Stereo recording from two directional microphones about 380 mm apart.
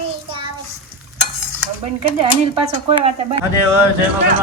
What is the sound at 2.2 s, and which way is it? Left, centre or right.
Speech, centre.